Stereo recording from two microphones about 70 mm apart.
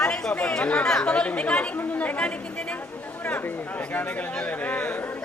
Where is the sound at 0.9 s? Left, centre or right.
Centre.